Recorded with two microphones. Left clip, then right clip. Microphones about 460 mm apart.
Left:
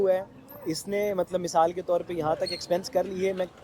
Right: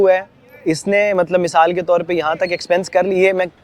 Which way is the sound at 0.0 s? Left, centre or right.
Right.